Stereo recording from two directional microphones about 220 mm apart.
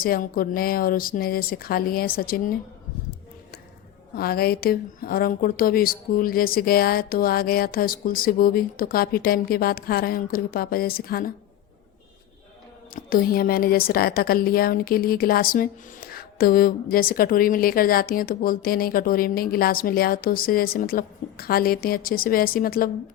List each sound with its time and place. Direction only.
0.0 s speech: 40° left (ahead or behind)
4.2 s a woman's voice: 45° left (ahead or behind)
12.9 s speech: 40° left (ahead or behind)